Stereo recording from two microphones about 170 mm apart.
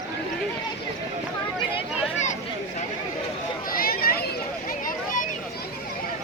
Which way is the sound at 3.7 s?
60° left (ahead or behind).